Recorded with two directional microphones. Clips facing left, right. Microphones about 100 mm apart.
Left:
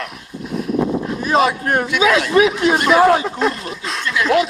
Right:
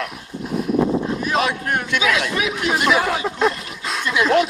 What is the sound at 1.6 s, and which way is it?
Speech, 40° left (ahead or behind).